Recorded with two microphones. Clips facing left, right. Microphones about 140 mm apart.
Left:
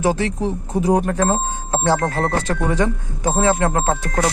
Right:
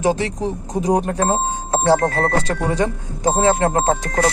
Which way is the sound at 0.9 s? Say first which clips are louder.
Even; 30° right (ahead or behind).